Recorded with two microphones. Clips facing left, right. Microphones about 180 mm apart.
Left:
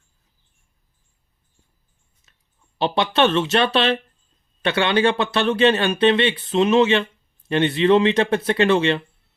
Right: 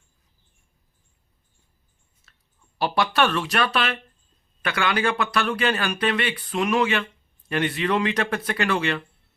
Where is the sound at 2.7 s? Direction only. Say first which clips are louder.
Left 3 dB; 25° left (ahead or behind).